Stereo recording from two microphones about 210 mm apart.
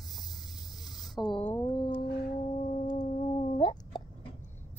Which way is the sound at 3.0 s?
35° left (ahead or behind).